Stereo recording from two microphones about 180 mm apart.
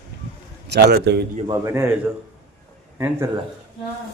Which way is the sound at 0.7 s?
65° right (ahead or behind).